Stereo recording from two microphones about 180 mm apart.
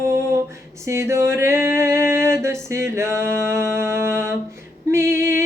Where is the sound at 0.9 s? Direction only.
15° right (ahead or behind).